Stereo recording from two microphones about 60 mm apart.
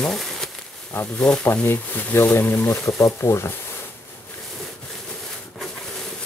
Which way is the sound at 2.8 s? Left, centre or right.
Left.